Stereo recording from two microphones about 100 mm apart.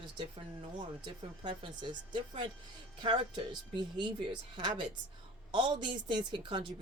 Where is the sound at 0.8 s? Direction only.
50° right (ahead or behind).